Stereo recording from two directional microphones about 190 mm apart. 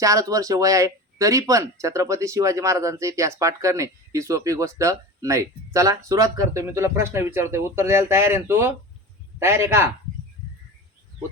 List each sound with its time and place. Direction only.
0.0 s speech: 15° right (ahead or behind)